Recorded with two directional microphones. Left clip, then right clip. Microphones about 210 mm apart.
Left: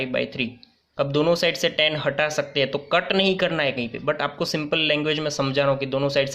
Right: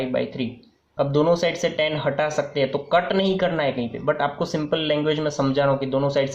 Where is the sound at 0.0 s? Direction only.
25° left (ahead or behind).